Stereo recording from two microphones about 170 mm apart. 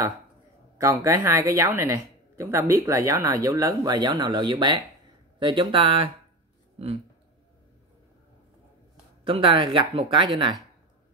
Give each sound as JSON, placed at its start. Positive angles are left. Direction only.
{"t": 0.7, "sound": "speech", "side_deg": -15}
{"t": 9.2, "sound": "speech", "side_deg": -30}